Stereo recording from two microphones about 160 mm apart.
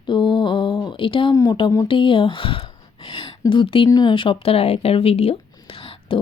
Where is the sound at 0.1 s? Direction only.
30° left (ahead or behind).